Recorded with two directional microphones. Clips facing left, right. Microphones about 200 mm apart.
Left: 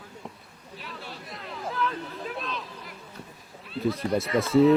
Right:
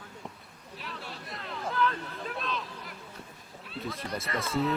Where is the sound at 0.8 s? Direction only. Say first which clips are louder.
Left 1 dB; centre (ahead or behind).